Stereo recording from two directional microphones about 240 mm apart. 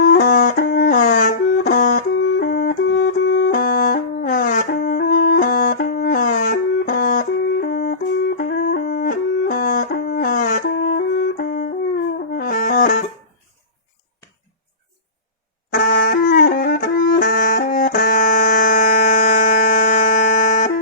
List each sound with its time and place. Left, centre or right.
0.0 s music: left
12.3 s brass instrument: left
15.7 s music: left